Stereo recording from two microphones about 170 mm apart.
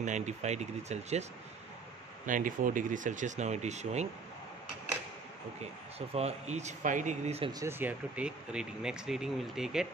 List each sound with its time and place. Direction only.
0.0 s speech: 45° right (ahead or behind)
2.2 s speech: 50° right (ahead or behind)
5.6 s speech: 40° right (ahead or behind)
7.5 s speech: 15° right (ahead or behind)